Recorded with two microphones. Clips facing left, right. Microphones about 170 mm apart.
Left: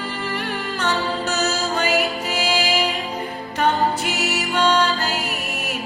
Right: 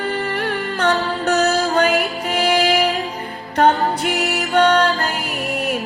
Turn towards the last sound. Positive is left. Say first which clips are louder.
# right 5 dB
turn(degrees=-55)  # may be behind; listen again after turning